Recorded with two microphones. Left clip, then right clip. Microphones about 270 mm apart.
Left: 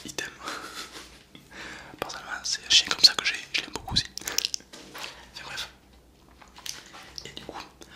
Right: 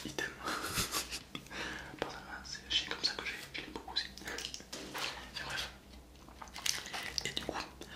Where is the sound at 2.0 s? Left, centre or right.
Left.